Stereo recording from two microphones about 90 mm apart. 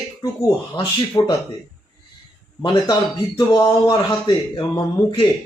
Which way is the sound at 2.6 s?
50° left (ahead or behind).